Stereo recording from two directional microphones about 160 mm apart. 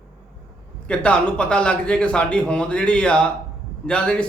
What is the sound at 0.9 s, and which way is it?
A man's voice, 5° left (ahead or behind).